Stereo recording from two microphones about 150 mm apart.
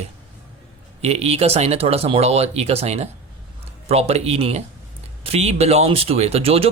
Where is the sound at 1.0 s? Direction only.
45° right (ahead or behind).